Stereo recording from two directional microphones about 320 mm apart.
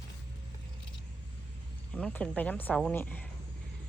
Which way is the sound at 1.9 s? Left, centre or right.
Centre.